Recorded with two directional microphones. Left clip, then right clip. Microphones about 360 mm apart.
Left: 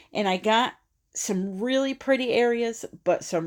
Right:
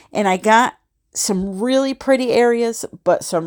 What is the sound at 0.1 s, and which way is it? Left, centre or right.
A woman's voice, right.